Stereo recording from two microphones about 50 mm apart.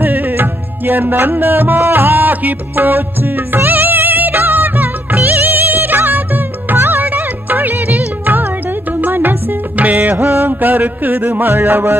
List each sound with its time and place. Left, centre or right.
0.0 s music: right